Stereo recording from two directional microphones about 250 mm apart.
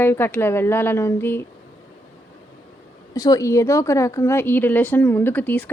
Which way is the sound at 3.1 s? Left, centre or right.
Centre.